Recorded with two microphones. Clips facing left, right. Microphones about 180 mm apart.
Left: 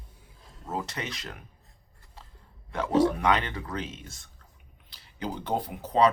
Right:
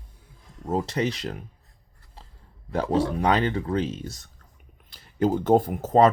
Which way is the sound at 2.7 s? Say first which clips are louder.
Even; 30° right (ahead or behind).